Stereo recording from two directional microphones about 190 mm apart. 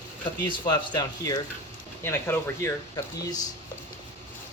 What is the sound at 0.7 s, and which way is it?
Speech, 20° left (ahead or behind).